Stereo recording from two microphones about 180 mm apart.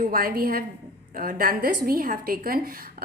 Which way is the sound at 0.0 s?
55° right (ahead or behind).